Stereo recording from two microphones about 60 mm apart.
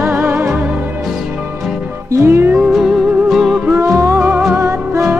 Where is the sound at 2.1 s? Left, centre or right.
Right.